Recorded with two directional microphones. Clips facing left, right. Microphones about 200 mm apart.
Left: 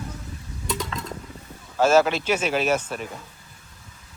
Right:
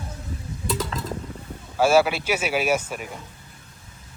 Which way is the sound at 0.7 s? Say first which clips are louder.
Right 2 dB; 5° right (ahead or behind).